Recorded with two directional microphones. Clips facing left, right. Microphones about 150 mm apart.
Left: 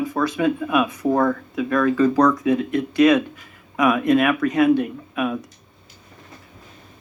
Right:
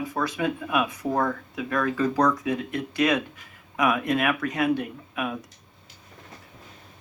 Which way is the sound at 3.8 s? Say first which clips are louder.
Left 6 dB; 90° left.